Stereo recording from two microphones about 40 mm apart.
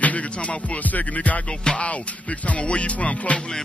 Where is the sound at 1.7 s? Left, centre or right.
Left.